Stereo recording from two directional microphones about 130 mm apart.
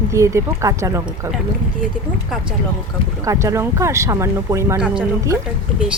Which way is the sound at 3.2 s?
25° right (ahead or behind).